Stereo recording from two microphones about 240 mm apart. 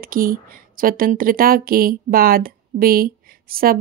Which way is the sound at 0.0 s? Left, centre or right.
Right.